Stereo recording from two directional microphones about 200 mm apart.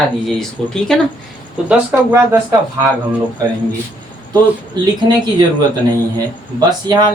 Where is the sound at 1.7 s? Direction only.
10° right (ahead or behind).